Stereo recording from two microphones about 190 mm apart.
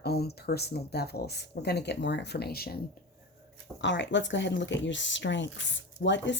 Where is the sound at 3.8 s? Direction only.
70° left (ahead or behind).